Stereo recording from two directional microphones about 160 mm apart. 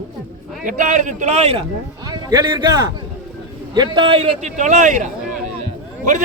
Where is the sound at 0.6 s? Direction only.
55° right (ahead or behind).